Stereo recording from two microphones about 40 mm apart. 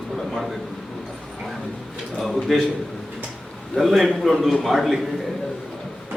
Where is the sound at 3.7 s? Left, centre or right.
Centre.